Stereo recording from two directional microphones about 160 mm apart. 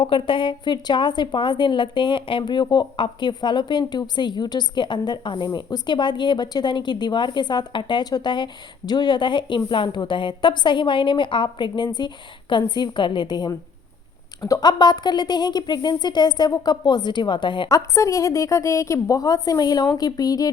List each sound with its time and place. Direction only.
0.0 s a woman's voice: 30° left (ahead or behind)